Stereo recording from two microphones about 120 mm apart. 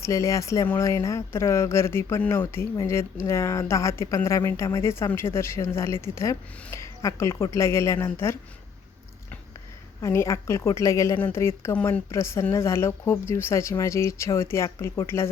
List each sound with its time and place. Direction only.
0.0 s speech: 25° left (ahead or behind)
10.0 s speech: 25° left (ahead or behind)